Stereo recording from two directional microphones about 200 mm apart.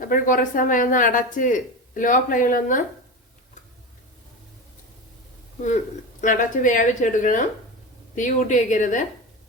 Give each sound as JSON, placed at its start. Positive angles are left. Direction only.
{"t": 0.0, "sound": "speech", "side_deg": 45}
{"t": 6.2, "sound": "a woman's voice", "side_deg": 40}